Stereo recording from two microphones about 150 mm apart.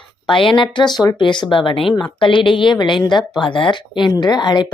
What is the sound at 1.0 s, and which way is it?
Speech, 30° left (ahead or behind).